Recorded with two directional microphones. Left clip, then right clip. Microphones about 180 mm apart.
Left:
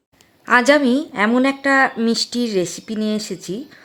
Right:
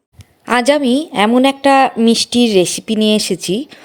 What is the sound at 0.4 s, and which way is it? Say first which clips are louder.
A woman's voice: right 1 dB; 25° right (ahead or behind).